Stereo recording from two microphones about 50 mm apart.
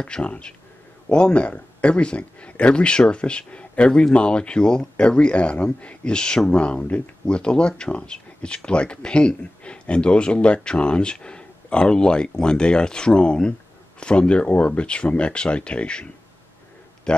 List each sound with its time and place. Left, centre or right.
0.0 s speech: left